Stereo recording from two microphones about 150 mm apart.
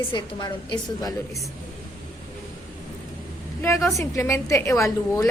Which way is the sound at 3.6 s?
20° left (ahead or behind).